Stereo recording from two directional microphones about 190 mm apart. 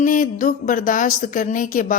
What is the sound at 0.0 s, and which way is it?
Speech, 45° left (ahead or behind).